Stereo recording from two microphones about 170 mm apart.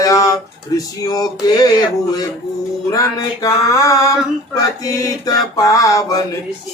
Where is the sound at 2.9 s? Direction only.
20° left (ahead or behind).